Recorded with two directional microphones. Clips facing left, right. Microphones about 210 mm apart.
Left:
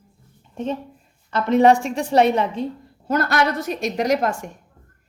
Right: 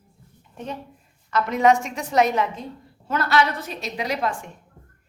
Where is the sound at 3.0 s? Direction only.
45° left (ahead or behind).